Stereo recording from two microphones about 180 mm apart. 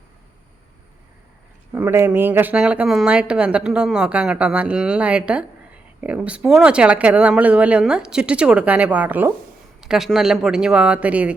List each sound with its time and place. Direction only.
1.7 s a woman's voice: 15° right (ahead or behind)